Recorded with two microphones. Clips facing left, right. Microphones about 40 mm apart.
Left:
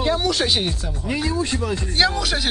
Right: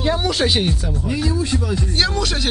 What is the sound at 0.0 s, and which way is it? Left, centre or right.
Speech, centre.